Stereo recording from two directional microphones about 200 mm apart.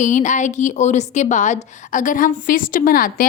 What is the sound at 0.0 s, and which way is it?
A woman's voice, 40° left (ahead or behind).